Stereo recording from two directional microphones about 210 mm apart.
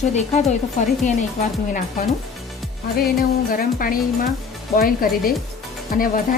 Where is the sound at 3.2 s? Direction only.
45° left (ahead or behind).